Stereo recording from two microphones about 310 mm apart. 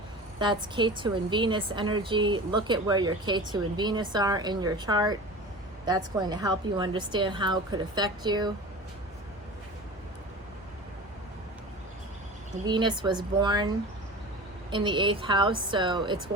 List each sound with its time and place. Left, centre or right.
0.3 s a woman's voice: centre
12.6 s a woman's voice: centre
14.7 s a woman's voice: centre